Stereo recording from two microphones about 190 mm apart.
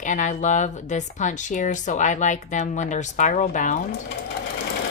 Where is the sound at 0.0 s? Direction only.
40° left (ahead or behind).